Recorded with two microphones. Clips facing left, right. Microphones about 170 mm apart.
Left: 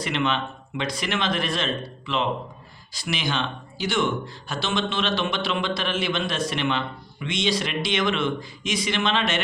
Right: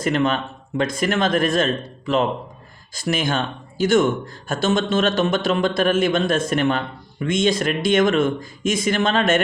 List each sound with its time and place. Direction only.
0.0 s speech: 45° right (ahead or behind)